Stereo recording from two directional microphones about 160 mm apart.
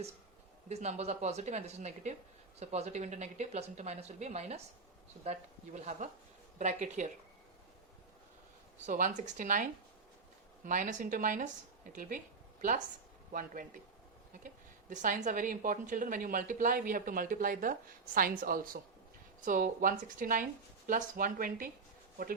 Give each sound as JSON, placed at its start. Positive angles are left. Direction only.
{"t": 0.7, "sound": "speech", "side_deg": -45}
{"t": 8.9, "sound": "a woman's voice", "side_deg": -55}
{"t": 13.3, "sound": "a woman's voice", "side_deg": -55}